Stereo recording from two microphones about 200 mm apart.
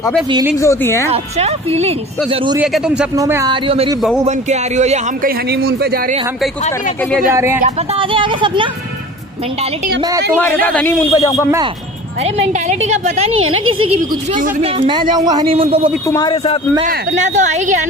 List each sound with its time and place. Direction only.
0.6 s a man's voice: 15° left (ahead or behind)
1.1 s speech: 30° right (ahead or behind)
2.6 s a man's voice: 5° right (ahead or behind)
3.2 s a man's voice: 15° right (ahead or behind)
3.6 s speech: 25° right (ahead or behind)
5.5 s a man's voice: 50° right (ahead or behind)
8.0 s speech: 25° right (ahead or behind)
10.6 s a man's voice: 5° left (ahead or behind)
12.4 s speech: 35° right (ahead or behind)
13.3 s speech: 90° right
13.9 s speech: 40° right (ahead or behind)
14.9 s speech: 25° right (ahead or behind)
16.1 s speech: 20° left (ahead or behind)
16.8 s speech: 35° right (ahead or behind)